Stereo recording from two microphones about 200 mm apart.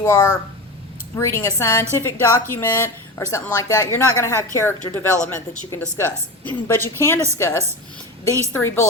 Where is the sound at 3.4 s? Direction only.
15° left (ahead or behind).